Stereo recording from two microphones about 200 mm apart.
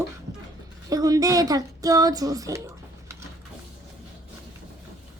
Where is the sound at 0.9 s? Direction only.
20° right (ahead or behind).